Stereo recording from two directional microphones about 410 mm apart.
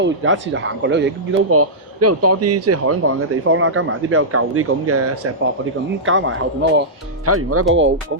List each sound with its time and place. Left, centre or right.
0.0 s speech: right